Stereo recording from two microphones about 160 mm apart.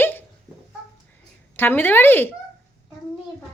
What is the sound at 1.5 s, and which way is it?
Speech, 15° left (ahead or behind).